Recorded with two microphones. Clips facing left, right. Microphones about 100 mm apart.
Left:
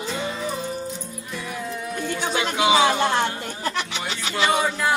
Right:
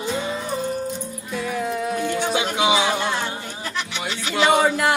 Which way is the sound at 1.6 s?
65° right (ahead or behind).